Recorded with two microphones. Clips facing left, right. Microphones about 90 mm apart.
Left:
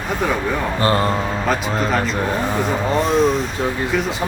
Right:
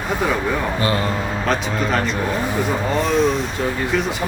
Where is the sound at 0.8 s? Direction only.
40° left (ahead or behind).